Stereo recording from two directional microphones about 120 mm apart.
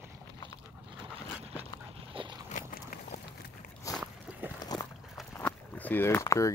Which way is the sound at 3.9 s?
30° left (ahead or behind).